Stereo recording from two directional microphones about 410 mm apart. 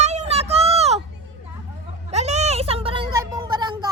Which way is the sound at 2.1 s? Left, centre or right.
Centre.